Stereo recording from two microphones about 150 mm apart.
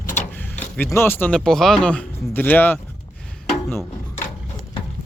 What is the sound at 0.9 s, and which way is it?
Speech, 15° left (ahead or behind).